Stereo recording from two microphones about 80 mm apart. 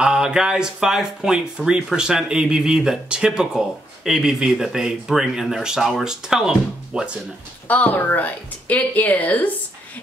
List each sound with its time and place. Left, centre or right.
0.0 s speech: centre
7.6 s speech: left